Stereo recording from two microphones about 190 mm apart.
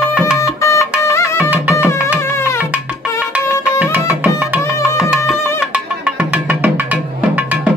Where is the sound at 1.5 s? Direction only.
10° right (ahead or behind).